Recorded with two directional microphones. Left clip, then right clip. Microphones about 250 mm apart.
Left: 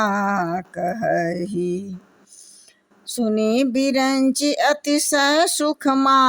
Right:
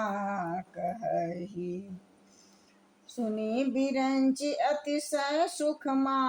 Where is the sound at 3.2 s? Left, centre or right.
Left.